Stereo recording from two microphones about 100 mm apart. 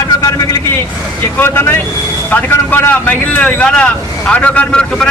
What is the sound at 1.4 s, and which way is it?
Speech, 25° left (ahead or behind).